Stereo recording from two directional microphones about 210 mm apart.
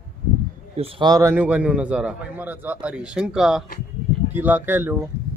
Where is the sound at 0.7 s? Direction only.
20° right (ahead or behind).